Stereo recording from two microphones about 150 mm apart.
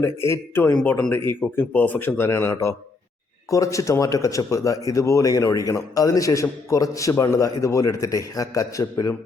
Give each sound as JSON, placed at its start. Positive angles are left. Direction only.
{"t": 0.0, "sound": "speech", "side_deg": 15}